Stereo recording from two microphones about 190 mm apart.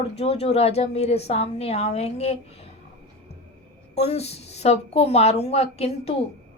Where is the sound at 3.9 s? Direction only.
35° left (ahead or behind).